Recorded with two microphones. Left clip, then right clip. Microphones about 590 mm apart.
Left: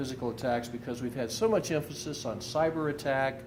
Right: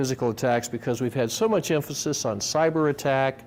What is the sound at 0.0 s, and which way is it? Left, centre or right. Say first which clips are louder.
Speech: right 8 dB; right.